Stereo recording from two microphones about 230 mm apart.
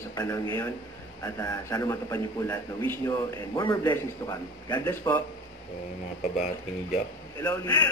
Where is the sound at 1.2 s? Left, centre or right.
Centre.